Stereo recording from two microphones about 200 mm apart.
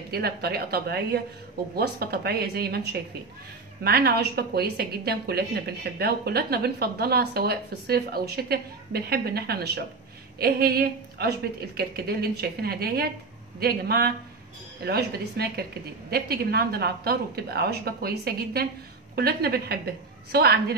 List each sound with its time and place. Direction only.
0.1 s a woman's voice: 50° right (ahead or behind)